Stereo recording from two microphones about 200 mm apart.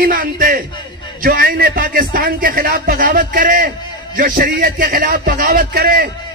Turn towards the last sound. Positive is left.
turn(degrees=-50)  # may be behind; listen again after turning